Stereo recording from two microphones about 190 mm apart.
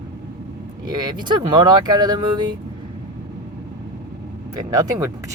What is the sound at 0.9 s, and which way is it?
Speech, 20° right (ahead or behind).